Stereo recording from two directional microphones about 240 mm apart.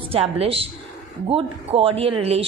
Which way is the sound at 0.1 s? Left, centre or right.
Right.